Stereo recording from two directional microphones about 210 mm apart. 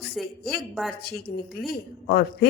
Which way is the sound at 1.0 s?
45° left (ahead or behind).